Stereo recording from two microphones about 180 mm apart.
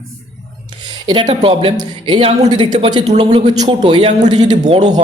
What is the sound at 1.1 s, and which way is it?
A man's voice, 25° right (ahead or behind).